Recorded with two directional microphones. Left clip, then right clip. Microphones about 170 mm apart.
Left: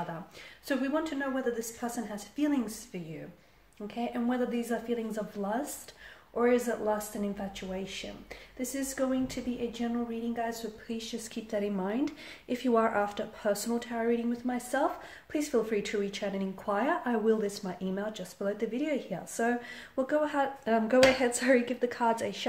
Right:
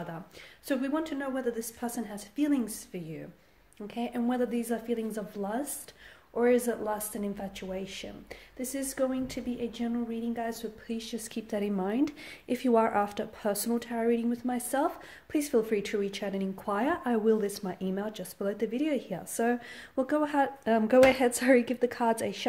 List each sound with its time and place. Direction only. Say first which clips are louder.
0.7 s a woman's voice: even; 55° right (ahead or behind)